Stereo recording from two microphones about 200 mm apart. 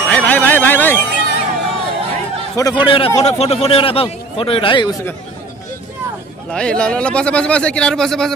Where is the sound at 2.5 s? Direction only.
20° left (ahead or behind).